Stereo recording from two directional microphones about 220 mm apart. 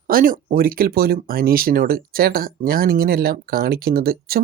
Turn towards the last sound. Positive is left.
turn(degrees=-45)  # may be behind; listen again after turning